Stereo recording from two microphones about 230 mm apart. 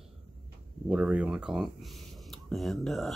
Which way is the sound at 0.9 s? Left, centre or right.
Centre.